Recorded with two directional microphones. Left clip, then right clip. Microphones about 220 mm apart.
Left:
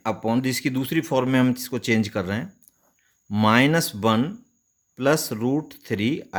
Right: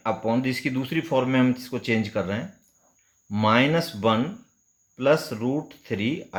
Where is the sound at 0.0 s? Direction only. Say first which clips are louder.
Even; 45° left (ahead or behind).